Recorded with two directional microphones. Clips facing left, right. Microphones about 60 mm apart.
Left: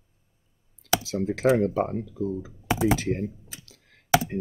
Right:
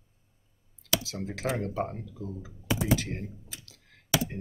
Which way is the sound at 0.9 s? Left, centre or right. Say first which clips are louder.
Left 7 dB; left.